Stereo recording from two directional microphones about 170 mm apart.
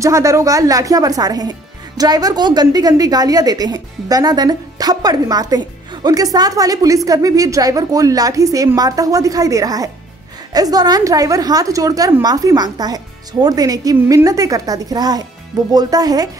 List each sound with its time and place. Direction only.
0.0 s a woman's voice: 20° right (ahead or behind)